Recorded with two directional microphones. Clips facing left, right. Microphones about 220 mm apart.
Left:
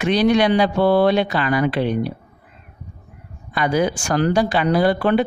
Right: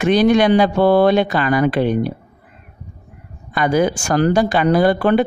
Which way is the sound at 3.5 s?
50° right (ahead or behind).